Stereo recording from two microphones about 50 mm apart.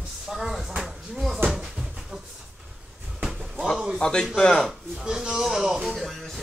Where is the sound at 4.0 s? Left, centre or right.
Centre.